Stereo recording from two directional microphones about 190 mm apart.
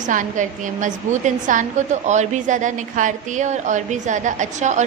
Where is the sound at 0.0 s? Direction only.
40° right (ahead or behind).